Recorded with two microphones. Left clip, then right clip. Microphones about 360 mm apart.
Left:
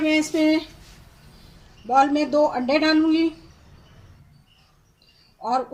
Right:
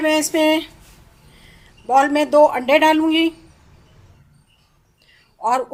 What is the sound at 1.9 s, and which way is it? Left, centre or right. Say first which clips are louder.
A woman's voice: right 5 dB; centre.